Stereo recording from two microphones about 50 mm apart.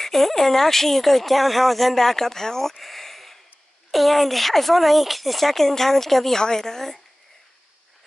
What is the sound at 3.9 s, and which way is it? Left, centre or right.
Speech, centre.